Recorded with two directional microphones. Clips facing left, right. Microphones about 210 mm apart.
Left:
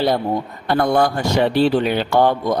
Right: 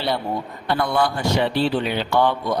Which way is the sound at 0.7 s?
45° left (ahead or behind).